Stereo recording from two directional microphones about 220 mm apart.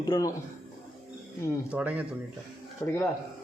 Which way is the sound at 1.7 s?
5° right (ahead or behind).